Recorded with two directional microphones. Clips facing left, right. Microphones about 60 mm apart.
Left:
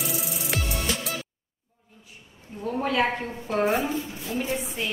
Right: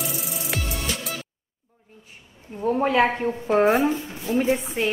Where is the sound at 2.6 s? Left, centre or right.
Right.